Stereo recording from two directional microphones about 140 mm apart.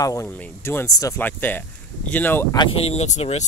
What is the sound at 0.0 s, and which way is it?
Speech, 20° left (ahead or behind).